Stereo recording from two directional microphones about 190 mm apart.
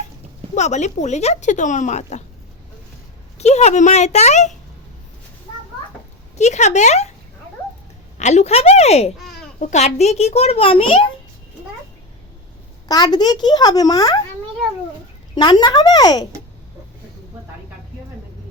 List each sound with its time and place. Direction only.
0.5 s speech: 40° left (ahead or behind)
3.3 s speech: 35° left (ahead or behind)
6.3 s speech: 35° left (ahead or behind)
8.2 s speech: 35° left (ahead or behind)
12.9 s a child's voice: 20° left (ahead or behind)
15.4 s a child's voice: 20° left (ahead or behind)